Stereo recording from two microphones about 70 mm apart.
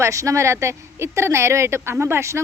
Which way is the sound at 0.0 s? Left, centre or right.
Right.